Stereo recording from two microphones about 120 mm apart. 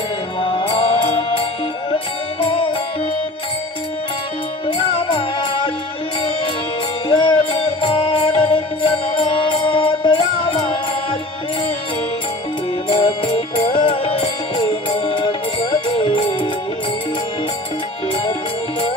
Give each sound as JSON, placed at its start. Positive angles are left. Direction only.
{"t": 0.4, "sound": "music", "side_deg": 50}
{"t": 2.4, "sound": "music", "side_deg": 50}
{"t": 4.7, "sound": "music", "side_deg": 45}
{"t": 7.1, "sound": "music", "side_deg": 45}
{"t": 12.8, "sound": "music", "side_deg": 45}